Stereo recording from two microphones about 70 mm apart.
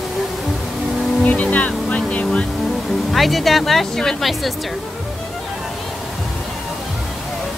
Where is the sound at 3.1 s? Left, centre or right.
Centre.